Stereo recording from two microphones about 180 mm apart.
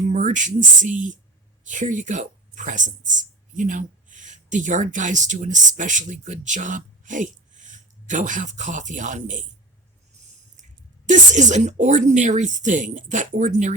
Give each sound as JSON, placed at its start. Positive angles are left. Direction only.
{"t": 0.1, "sound": "speech", "side_deg": -45}
{"t": 10.6, "sound": "speech", "side_deg": -45}